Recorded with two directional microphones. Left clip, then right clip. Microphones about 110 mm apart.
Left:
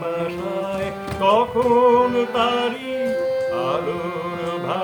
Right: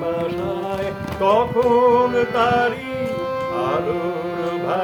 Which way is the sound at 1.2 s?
20° right (ahead or behind).